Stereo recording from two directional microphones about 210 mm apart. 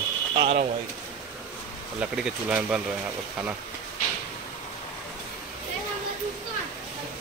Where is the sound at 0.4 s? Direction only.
30° right (ahead or behind).